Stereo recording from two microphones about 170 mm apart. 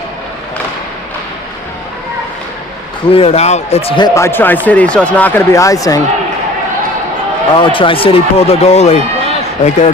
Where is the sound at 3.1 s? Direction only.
35° left (ahead or behind).